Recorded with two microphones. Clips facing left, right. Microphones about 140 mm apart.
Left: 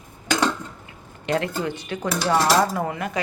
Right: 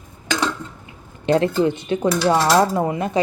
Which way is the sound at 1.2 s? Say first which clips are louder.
Right 7 dB; 30° right (ahead or behind).